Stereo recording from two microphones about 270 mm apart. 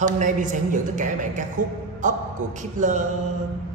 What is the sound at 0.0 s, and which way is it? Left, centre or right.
A man's voice, right.